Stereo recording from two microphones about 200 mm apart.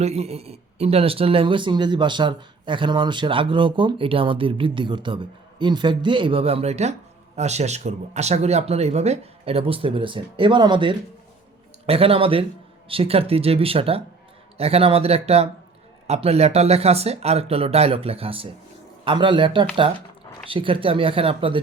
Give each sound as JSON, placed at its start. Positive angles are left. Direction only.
{"t": 0.0, "sound": "speech", "side_deg": -30}